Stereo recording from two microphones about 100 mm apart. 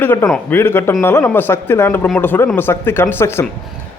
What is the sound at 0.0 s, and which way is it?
A man's voice, 20° left (ahead or behind).